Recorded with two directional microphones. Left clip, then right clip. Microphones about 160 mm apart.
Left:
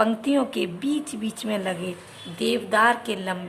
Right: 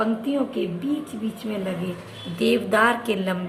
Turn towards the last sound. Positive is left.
turn(degrees=20)  # may be behind; listen again after turning